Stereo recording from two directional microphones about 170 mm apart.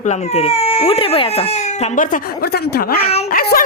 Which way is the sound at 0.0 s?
40° left (ahead or behind).